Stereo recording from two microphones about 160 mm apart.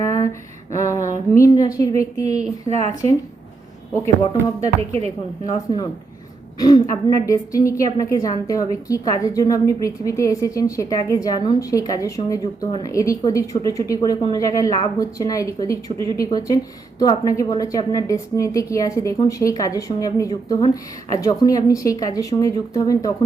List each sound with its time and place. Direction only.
0.0 s a sound: 20° left (ahead or behind)
1.3 s a woman's voice: 20° left (ahead or behind)
2.6 s a woman's voice: 45° right (ahead or behind)
4.8 s a woman's voice: 40° right (ahead or behind)
5.5 s a woman's voice: 25° left (ahead or behind)